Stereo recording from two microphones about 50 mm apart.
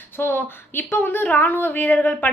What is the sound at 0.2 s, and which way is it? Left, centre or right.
A woman's voice, left.